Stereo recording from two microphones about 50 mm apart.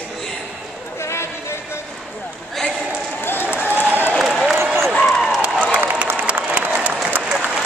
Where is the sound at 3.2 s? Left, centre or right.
Left.